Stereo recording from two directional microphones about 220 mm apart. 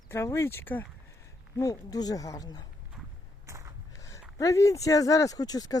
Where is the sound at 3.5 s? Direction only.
15° right (ahead or behind).